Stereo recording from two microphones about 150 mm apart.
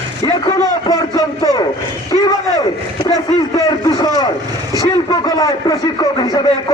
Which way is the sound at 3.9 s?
30° left (ahead or behind).